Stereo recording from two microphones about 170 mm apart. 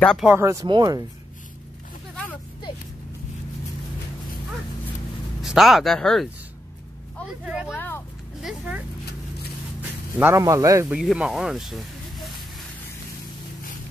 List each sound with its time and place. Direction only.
0.0 s speech: 5° left (ahead or behind)
0.3 s speech: 15° right (ahead or behind)
5.4 s speech: centre (ahead or behind)
7.4 s speech: 5° right (ahead or behind)
7.7 s a sound: 10° left (ahead or behind)
8.4 s a sound: 5° right (ahead or behind)
9.8 s a man's voice: 10° right (ahead or behind)
10.9 s speech: 5° right (ahead or behind)